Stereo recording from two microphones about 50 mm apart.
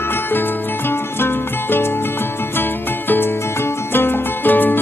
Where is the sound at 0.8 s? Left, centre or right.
Left.